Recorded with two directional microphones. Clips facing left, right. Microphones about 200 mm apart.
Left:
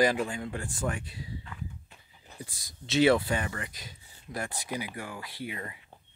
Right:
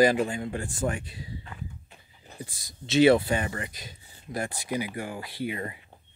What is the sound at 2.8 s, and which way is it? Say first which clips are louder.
Speech: right 4 dB; 20° right (ahead or behind).